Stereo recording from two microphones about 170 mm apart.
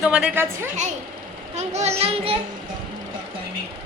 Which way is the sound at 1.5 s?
40° right (ahead or behind).